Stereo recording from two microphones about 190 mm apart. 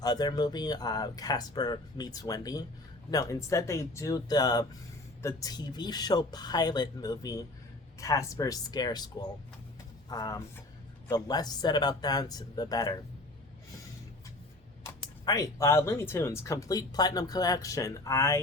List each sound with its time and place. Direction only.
0.0 s speech: 20° left (ahead or behind)
15.2 s speech: 20° left (ahead or behind)